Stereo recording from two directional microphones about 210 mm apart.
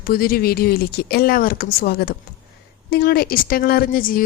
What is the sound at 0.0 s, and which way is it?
Speech, 45° left (ahead or behind).